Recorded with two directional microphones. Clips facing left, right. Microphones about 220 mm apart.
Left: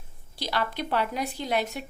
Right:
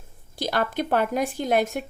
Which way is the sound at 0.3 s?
50° right (ahead or behind).